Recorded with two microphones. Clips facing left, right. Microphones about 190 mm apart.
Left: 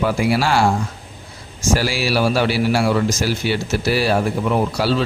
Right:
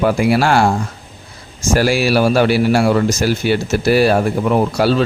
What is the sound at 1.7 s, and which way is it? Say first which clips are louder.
A man's voice: right 5 dB; 55° right (ahead or behind).